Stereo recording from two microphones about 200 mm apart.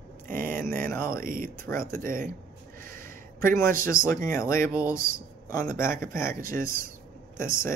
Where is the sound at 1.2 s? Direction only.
45° right (ahead or behind).